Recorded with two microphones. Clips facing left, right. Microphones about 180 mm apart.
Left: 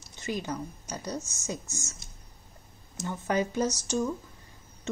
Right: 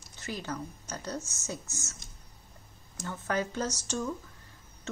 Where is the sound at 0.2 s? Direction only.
15° left (ahead or behind).